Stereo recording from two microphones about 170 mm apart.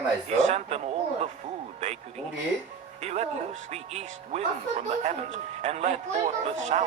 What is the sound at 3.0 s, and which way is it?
A man's voice, 40° right (ahead or behind).